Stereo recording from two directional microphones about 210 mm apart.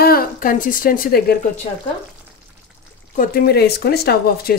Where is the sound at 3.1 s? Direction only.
45° left (ahead or behind).